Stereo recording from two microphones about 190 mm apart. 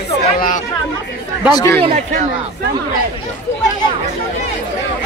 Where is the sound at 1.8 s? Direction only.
30° right (ahead or behind).